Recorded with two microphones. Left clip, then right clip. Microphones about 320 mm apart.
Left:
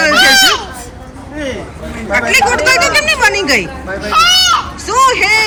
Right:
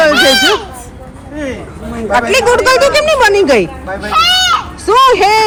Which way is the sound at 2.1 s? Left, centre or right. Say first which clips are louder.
Right 1 dB; centre.